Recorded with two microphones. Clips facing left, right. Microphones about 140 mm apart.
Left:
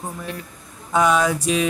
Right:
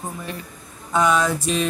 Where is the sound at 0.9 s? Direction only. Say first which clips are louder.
Left 1 dB; 10° left (ahead or behind).